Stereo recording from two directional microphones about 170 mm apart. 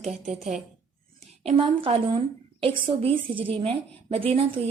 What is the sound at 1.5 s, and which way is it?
A woman's voice, 35° right (ahead or behind).